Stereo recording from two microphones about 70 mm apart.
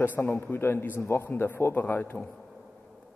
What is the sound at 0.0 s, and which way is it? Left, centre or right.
A man's voice, left.